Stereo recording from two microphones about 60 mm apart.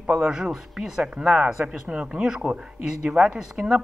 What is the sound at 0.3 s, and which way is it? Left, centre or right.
Speech, centre.